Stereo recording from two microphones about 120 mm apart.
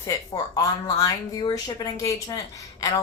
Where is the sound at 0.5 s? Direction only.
30° left (ahead or behind).